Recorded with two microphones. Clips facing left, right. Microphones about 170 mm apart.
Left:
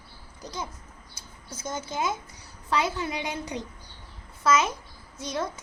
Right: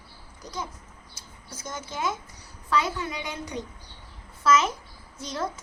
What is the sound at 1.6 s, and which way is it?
A woman's voice, 25° left (ahead or behind).